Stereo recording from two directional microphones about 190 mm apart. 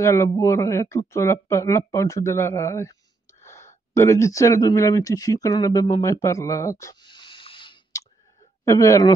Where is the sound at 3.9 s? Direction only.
15° left (ahead or behind).